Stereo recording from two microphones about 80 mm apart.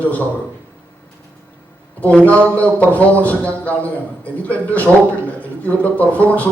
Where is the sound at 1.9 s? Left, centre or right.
Centre.